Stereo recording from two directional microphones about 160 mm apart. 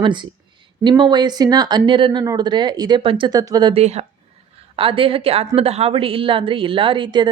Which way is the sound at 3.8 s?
40° right (ahead or behind).